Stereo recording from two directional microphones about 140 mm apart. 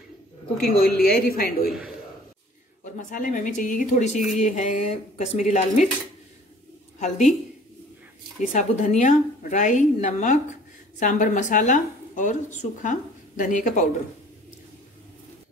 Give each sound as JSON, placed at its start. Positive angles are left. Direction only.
{"t": 0.6, "sound": "a woman's voice", "side_deg": 90}
{"t": 2.8, "sound": "a woman's voice", "side_deg": 65}
{"t": 7.0, "sound": "a woman's voice", "side_deg": 55}
{"t": 8.5, "sound": "a woman's voice", "side_deg": 60}